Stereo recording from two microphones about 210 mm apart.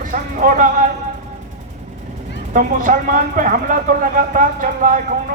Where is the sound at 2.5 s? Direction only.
40° right (ahead or behind).